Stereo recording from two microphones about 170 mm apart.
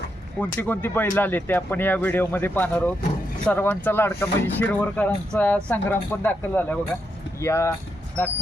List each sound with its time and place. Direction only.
0.3 s speech: 10° left (ahead or behind)